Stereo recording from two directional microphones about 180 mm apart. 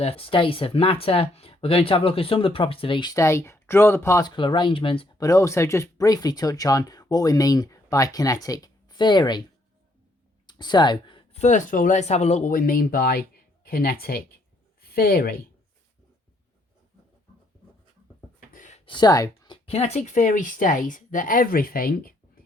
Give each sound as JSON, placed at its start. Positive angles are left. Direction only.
{"t": 0.0, "sound": "speech", "side_deg": 30}
{"t": 4.4, "sound": "speech", "side_deg": 25}
{"t": 5.2, "sound": "speech", "side_deg": 15}
{"t": 10.4, "sound": "a sound", "side_deg": 25}
{"t": 11.4, "sound": "speech", "side_deg": 45}
{"t": 18.5, "sound": "a sound", "side_deg": 45}
{"t": 18.9, "sound": "speech", "side_deg": 25}
{"t": 19.6, "sound": "speech", "side_deg": 35}